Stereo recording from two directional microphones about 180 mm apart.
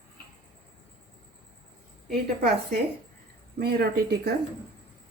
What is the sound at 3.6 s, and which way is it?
Speech, 60° right (ahead or behind).